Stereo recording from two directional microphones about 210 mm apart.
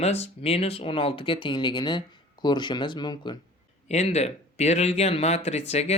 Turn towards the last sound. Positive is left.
turn(degrees=30)  # may be behind; listen again after turning